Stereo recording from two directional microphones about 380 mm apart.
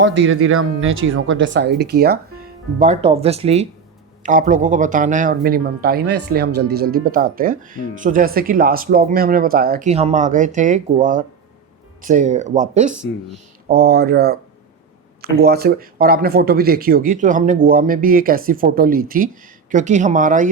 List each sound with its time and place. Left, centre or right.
0.0 s speech: right
12.9 s speech: centre
13.7 s speech: right